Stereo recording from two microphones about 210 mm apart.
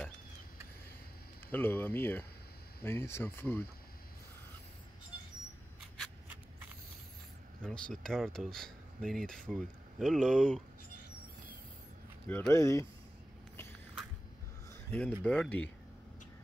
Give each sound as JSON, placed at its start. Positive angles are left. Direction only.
{"t": 1.5, "sound": "speech", "side_deg": 10}
{"t": 6.2, "sound": "a sound", "side_deg": -10}
{"t": 7.6, "sound": "speech", "side_deg": 5}
{"t": 12.3, "sound": "speech", "side_deg": 10}
{"t": 14.9, "sound": "speech", "side_deg": 5}